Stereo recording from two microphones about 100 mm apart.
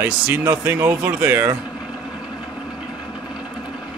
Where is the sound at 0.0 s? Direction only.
20° right (ahead or behind).